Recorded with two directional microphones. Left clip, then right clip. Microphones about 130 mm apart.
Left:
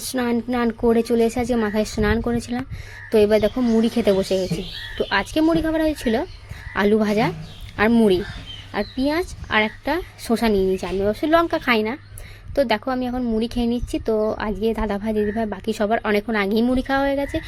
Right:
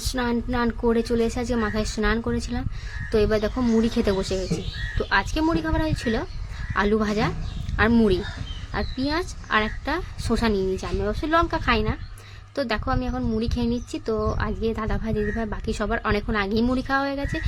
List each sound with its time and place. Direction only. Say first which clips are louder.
0.0 s a woman's voice: left 3 dB; 20° left (ahead or behind)
3.5 s a woman's voice: left 3 dB; 10° left (ahead or behind)